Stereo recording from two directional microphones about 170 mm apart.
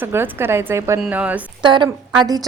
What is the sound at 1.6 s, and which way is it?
Speech, 25° right (ahead or behind).